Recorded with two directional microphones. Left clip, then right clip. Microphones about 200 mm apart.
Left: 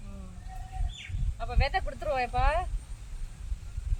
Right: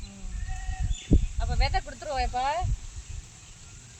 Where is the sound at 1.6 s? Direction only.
20° left (ahead or behind).